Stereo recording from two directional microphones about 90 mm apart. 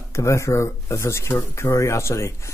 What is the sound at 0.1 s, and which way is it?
Speech, 35° left (ahead or behind).